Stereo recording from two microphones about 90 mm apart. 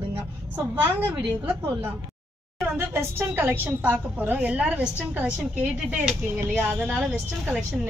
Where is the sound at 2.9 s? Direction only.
25° right (ahead or behind).